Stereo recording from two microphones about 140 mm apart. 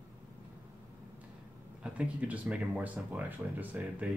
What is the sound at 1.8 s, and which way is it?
Speech, 10° right (ahead or behind).